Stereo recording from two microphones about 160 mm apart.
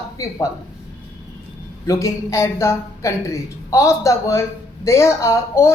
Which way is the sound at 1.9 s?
20° left (ahead or behind).